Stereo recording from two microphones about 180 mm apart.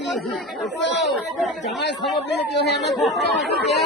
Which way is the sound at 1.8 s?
70° left (ahead or behind).